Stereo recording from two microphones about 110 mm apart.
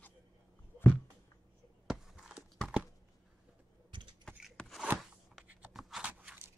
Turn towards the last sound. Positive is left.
turn(degrees=-10)  # may be behind; listen again after turning